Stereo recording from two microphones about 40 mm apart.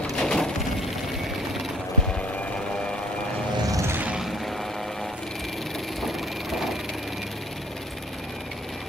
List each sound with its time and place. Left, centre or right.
0.2 s wood: centre
5.9 s vehicle: centre